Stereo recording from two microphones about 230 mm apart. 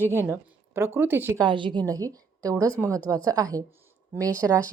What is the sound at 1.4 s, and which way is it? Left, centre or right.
A woman's voice, right.